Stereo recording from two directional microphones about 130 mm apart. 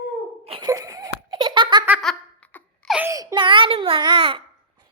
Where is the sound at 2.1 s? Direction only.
Centre (ahead or behind).